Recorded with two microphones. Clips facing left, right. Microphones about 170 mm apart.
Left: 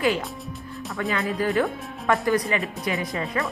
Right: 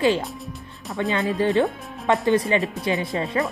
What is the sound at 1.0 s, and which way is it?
Speech, 25° right (ahead or behind).